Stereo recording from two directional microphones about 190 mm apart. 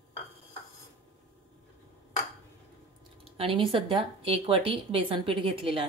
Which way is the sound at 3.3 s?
30° right (ahead or behind).